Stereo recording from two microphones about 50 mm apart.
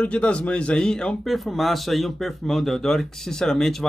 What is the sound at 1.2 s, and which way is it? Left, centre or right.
Speech, centre.